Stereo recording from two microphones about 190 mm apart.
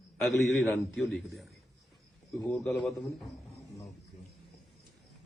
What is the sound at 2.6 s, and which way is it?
Speech, centre (ahead or behind).